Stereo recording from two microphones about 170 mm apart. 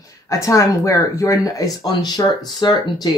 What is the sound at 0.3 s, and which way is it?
Speech, 20° left (ahead or behind).